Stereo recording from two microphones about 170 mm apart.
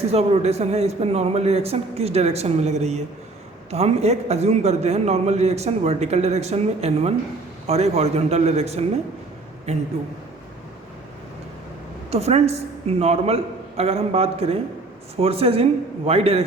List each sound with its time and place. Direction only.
0.1 s a man's voice: 35° right (ahead or behind)
12.1 s a man's voice: 40° right (ahead or behind)